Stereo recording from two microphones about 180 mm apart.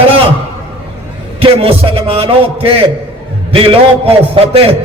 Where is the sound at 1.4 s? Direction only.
30° right (ahead or behind).